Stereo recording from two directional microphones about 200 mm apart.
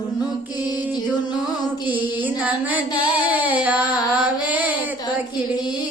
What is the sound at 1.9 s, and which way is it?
Female singing, 10° right (ahead or behind).